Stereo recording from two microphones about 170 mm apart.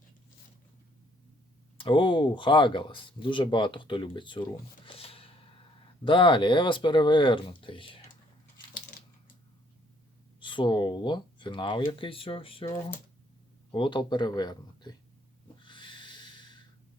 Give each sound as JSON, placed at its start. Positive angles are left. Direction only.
{"t": 1.8, "sound": "speech", "side_deg": 30}
{"t": 4.9, "sound": "a sound", "side_deg": 35}
{"t": 6.1, "sound": "speech", "side_deg": 30}
{"t": 10.4, "sound": "speech", "side_deg": 30}
{"t": 13.7, "sound": "speech", "side_deg": 30}
{"t": 15.6, "sound": "snort", "side_deg": 30}